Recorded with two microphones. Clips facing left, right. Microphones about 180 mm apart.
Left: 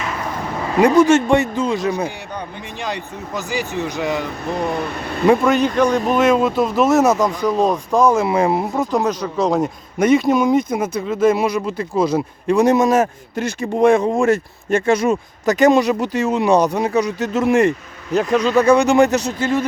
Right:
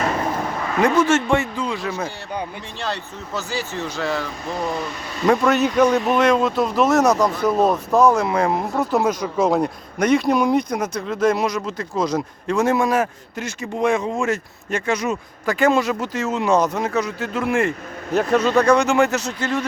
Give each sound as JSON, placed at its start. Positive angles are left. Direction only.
{"t": 1.0, "sound": "speech", "side_deg": 15}
{"t": 4.4, "sound": "speech", "side_deg": 60}
{"t": 5.3, "sound": "speech", "side_deg": 0}
{"t": 6.1, "sound": "speech", "side_deg": 5}
{"t": 8.8, "sound": "speech", "side_deg": -5}
{"t": 13.6, "sound": "speech", "side_deg": 55}
{"t": 15.4, "sound": "speech", "side_deg": 20}
{"t": 18.1, "sound": "speech", "side_deg": 0}